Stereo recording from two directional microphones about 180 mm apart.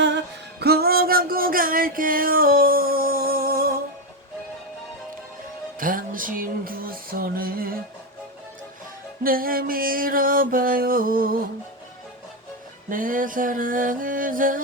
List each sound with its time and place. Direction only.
0.6 s music: 60° right (ahead or behind)
5.8 s music: 50° right (ahead or behind)
9.2 s music: 55° right (ahead or behind)
12.9 s music: 50° right (ahead or behind)